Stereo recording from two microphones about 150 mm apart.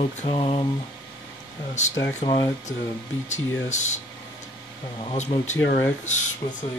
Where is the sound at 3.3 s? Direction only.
50° left (ahead or behind).